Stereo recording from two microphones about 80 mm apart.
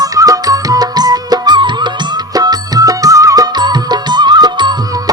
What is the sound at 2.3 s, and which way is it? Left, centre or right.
Music, right.